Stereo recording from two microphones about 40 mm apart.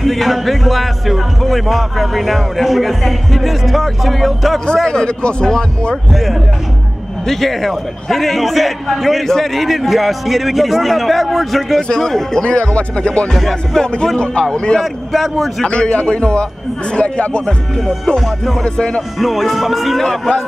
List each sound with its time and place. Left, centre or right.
0.0 s speech: centre
4.8 s speech: centre
6.1 s speech: centre
7.2 s a man's voice: centre
12.4 s speech: left
13.3 s speech: centre
14.1 s speech: left
14.8 s speech: centre
15.6 s speech: left
18.2 s speech: centre
18.6 s speech: left
19.1 s speech: centre
20.1 s a man's voice: centre